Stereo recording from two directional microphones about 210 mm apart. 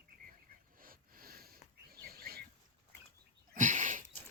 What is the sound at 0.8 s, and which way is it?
Rub, 45° right (ahead or behind).